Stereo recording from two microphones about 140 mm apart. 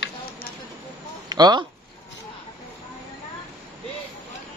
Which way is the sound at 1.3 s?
30° right (ahead or behind).